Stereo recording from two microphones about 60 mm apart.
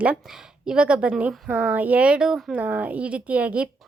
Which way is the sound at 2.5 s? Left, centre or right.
Right.